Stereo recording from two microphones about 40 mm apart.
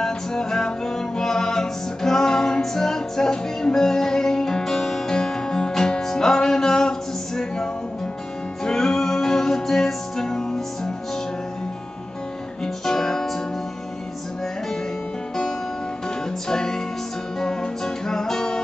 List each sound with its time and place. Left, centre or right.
0.0 s music: centre
12.6 s music: centre
16.4 s music: centre